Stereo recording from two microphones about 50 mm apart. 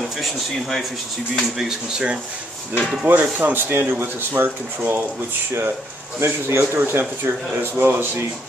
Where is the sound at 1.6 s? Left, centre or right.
Centre.